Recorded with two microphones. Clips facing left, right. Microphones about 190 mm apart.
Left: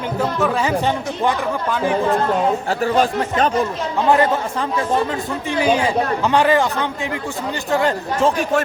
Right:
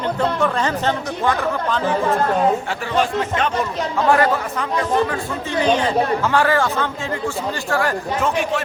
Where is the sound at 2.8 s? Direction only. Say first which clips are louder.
Left 3 dB; 40° left (ahead or behind).